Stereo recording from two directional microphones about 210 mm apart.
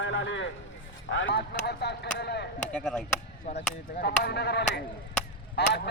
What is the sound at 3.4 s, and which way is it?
Speech, 35° left (ahead or behind).